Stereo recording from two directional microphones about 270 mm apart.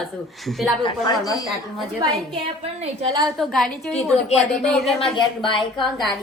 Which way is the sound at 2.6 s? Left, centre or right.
Right.